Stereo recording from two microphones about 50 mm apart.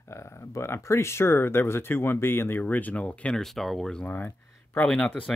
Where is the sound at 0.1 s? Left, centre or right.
Left.